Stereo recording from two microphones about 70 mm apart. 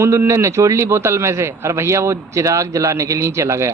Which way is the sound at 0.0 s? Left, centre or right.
Right.